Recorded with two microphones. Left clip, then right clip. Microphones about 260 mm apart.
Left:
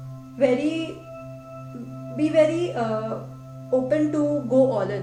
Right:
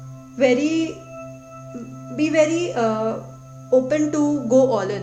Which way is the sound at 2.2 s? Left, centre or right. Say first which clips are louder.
Right 2 dB; right.